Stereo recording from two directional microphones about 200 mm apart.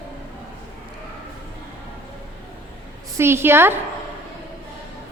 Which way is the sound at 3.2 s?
10° right (ahead or behind).